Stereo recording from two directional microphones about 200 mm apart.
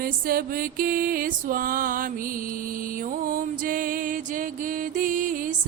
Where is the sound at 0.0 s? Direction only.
45° right (ahead or behind).